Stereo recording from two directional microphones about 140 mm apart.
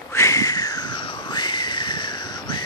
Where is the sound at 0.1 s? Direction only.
20° left (ahead or behind).